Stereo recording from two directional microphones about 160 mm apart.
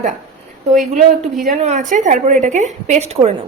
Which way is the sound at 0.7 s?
55° right (ahead or behind).